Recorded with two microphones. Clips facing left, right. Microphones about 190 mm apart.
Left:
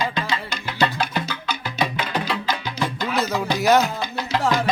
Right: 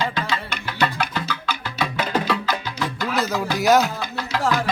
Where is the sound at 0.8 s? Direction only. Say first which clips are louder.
Left 1 dB; 15° left (ahead or behind).